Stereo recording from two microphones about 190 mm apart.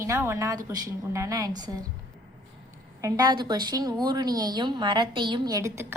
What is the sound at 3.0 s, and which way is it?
A woman's voice, 20° right (ahead or behind).